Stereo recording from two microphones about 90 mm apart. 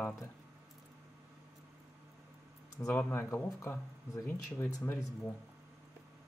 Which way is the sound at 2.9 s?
25° left (ahead or behind).